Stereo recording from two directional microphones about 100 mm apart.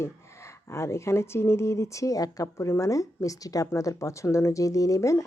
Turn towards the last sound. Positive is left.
turn(degrees=30)  # may be behind; listen again after turning